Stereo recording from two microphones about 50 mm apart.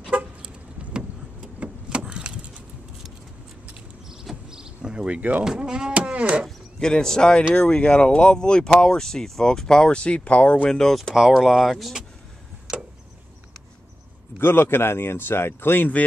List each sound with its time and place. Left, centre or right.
0.1 s vehicle: right
4.1 s vehicle: centre
5.4 s speech: centre
6.8 s speech: centre
10.7 s speech: centre
11.3 s speech: centre
14.4 s speech: left